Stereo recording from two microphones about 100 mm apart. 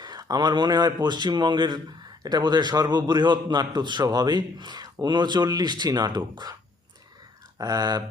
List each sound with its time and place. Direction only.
0.0 s a man's voice: 40° right (ahead or behind)
7.6 s speech: 40° right (ahead or behind)